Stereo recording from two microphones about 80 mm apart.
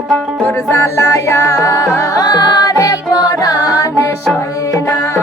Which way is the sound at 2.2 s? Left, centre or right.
Left.